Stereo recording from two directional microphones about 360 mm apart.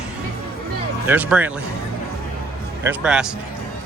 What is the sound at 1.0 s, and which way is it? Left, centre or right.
Speech, centre.